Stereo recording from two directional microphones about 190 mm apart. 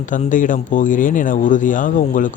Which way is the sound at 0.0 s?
40° left (ahead or behind).